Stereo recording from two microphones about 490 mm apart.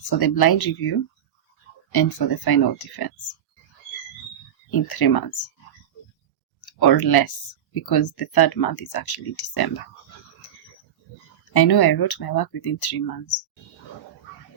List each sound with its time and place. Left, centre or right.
0.1 s speech: left
4.7 s speech: left
6.6 s speech: left
11.5 s speech: left